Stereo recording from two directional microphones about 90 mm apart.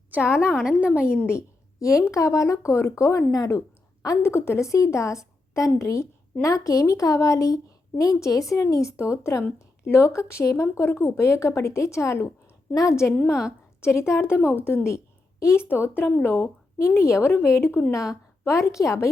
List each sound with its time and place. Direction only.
0.6 s a woman's voice: 10° right (ahead or behind)
1.0 s a woman's voice: 25° left (ahead or behind)
17.9 s speech: 40° left (ahead or behind)